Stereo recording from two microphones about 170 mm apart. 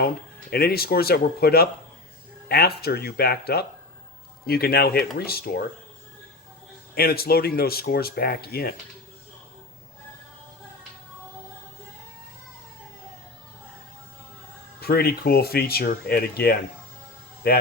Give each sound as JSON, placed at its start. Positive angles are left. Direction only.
{"t": 0.5, "sound": "speech", "side_deg": 65}
{"t": 6.9, "sound": "speech", "side_deg": 65}
{"t": 14.8, "sound": "speech", "side_deg": 65}